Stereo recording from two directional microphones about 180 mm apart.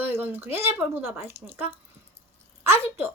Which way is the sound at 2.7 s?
10° right (ahead or behind).